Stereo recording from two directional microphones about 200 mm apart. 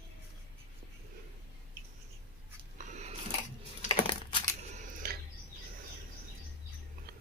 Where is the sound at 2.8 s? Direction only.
35° right (ahead or behind).